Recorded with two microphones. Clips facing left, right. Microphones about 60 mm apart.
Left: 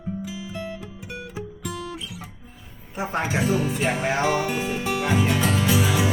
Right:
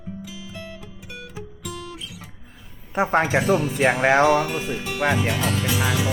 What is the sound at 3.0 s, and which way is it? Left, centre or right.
Speech, right.